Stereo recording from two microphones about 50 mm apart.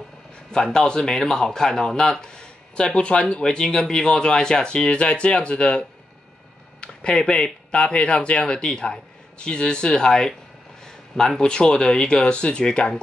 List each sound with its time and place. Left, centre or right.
0.7 s speech: centre
6.8 s a sound: centre
7.2 s speech: centre